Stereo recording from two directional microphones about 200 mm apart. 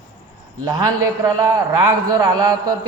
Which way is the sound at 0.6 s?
15° right (ahead or behind).